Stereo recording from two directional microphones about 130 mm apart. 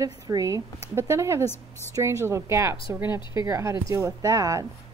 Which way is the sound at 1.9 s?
25° right (ahead or behind).